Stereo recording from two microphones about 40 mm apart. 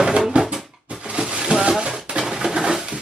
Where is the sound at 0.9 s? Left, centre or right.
Right.